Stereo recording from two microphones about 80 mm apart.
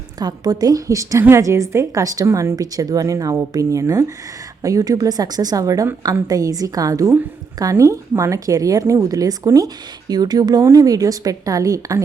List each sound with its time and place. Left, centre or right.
0.2 s a woman's voice: right
10.6 s a woman's voice: right